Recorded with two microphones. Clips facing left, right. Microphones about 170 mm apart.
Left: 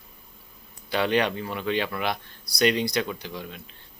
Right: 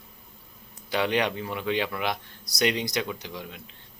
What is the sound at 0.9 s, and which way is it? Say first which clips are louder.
Speech: left 2 dB; 15° right (ahead or behind).